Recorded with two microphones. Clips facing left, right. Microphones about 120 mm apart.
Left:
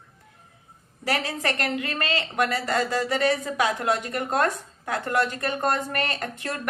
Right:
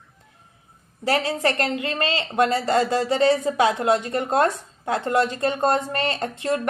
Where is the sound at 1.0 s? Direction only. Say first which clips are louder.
Right 5 dB; 25° right (ahead or behind).